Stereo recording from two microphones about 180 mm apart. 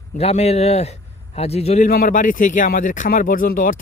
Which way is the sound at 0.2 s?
35° left (ahead or behind).